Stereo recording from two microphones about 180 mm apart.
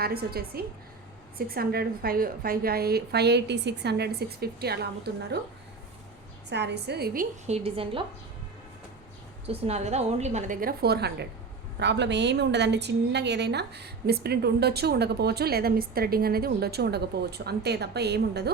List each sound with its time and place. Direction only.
0.0 s a woman's voice: 60° right (ahead or behind)
6.5 s a woman's voice: 70° right (ahead or behind)
7.4 s a woman's voice: 35° right (ahead or behind)
9.5 s a woman's voice: 35° right (ahead or behind); by 18.5 s 65° right (ahead or behind)